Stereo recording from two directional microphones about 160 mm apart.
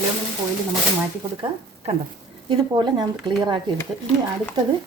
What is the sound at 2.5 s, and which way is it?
Speech, 25° right (ahead or behind).